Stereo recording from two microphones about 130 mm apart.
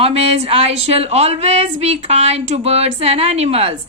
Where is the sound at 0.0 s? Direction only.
50° right (ahead or behind).